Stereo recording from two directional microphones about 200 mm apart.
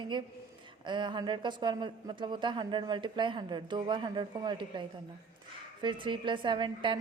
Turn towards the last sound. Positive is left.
turn(degrees=-25)  # may be behind; listen again after turning